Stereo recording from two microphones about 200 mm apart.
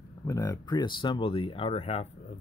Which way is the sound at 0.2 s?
20° left (ahead or behind).